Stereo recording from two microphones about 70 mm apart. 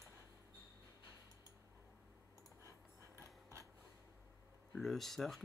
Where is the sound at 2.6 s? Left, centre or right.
Right.